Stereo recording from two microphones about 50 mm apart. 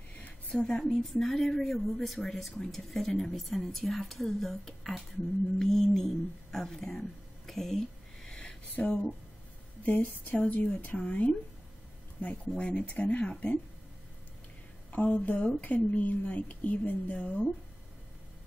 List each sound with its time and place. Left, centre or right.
0.5 s a woman's voice: centre
8.7 s a woman's voice: left
12.5 s speech: left
14.9 s a woman's voice: left